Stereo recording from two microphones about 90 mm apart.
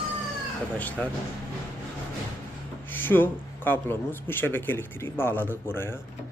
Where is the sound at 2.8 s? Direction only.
20° left (ahead or behind).